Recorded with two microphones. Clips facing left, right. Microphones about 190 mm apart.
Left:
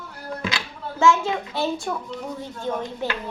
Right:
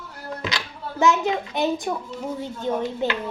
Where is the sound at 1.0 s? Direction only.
20° right (ahead or behind).